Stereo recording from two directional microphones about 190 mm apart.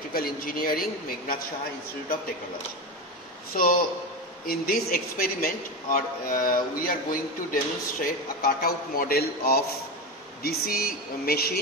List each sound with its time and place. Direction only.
0.1 s a man's voice: 50° left (ahead or behind)
3.5 s a man's voice: 50° left (ahead or behind)